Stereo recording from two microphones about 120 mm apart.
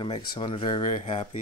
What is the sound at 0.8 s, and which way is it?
Speech, 65° left (ahead or behind).